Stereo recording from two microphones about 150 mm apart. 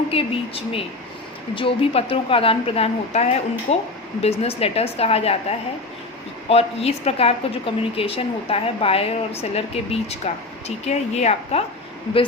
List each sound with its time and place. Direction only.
0.1 s a woman's voice: 40° left (ahead or behind)